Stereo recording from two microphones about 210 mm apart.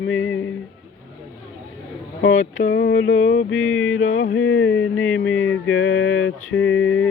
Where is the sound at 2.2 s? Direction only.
70° left (ahead or behind).